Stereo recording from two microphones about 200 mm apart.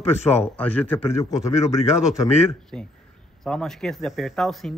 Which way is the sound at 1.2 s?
35° left (ahead or behind).